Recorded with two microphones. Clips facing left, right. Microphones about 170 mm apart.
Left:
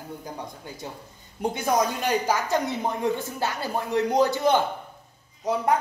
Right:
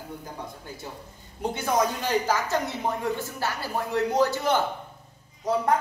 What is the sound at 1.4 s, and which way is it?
Speech, 15° left (ahead or behind).